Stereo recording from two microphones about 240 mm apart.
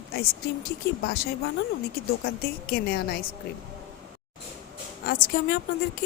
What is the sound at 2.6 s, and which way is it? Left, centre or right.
Speech, left.